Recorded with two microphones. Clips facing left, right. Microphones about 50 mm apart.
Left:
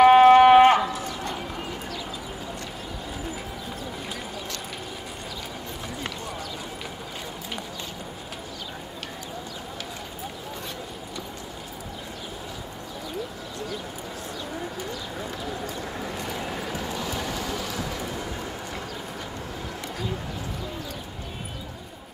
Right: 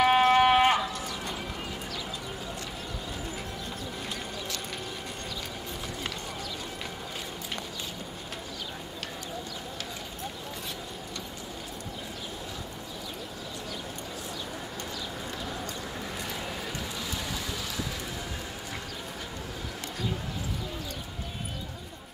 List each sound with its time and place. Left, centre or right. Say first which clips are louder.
0.0 s livestock: left 8 dB; centre
15.4 s clip-clop: left 4 dB; centre
16.8 s vehicle: left 5 dB; left